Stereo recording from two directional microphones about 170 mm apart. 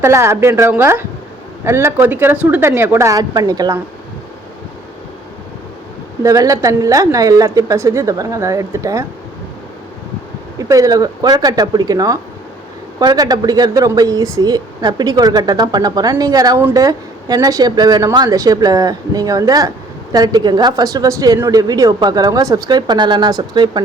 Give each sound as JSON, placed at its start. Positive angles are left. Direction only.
{"t": 0.0, "sound": "a woman's voice", "side_deg": -15}
{"t": 6.2, "sound": "speech", "side_deg": -20}
{"t": 10.6, "sound": "speech", "side_deg": -20}